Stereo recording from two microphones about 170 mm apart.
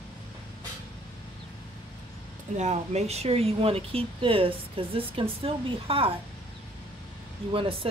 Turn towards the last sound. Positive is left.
turn(degrees=-30)  # may be behind; listen again after turning